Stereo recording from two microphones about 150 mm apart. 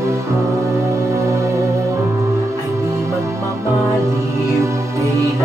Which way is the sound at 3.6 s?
20° right (ahead or behind).